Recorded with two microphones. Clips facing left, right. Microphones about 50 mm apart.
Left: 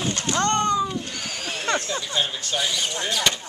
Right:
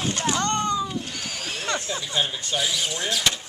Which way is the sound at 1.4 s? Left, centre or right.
Centre.